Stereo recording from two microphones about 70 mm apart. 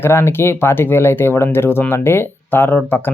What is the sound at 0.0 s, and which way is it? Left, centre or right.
Speech, left.